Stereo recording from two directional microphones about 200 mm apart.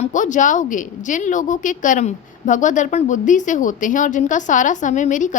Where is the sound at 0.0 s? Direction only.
40° left (ahead or behind).